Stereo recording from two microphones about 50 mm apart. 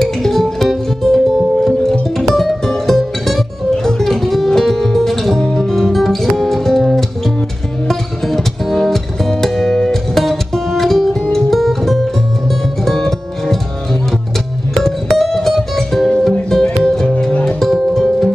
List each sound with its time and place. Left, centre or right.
0.0 s music: centre
7.9 s music: centre
14.7 s music: centre